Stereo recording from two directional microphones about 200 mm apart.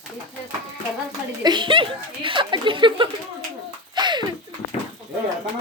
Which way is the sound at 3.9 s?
20° right (ahead or behind).